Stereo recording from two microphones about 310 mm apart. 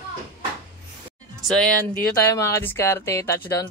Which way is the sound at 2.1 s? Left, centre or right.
Centre.